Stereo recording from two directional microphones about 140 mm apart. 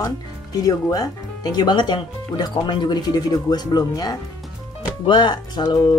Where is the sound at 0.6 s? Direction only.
25° left (ahead or behind).